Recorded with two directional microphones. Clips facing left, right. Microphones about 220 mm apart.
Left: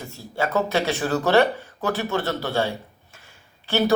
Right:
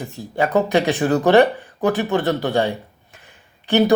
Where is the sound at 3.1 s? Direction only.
15° right (ahead or behind).